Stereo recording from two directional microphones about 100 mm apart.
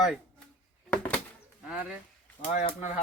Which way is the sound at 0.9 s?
15° left (ahead or behind).